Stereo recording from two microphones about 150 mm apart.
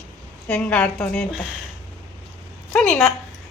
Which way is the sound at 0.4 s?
5° left (ahead or behind).